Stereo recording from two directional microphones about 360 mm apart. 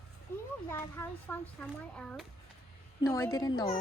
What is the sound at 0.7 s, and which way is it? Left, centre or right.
A child's voice, centre.